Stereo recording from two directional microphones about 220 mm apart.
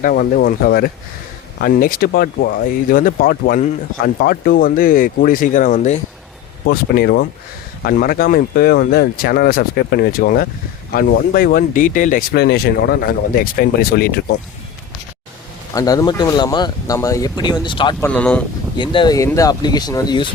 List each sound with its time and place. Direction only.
0.0 s speech: 40° left (ahead or behind)
6.7 s speech: 45° left (ahead or behind)
15.7 s speech: 15° left (ahead or behind)
18.0 s speech: 5° left (ahead or behind)
18.8 s speech: 20° left (ahead or behind)